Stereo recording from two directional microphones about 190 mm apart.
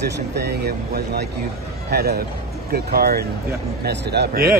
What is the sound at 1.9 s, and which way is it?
A man's voice, 55° right (ahead or behind).